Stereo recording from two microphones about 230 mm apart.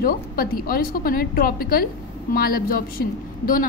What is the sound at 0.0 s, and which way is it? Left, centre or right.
A woman's voice, left.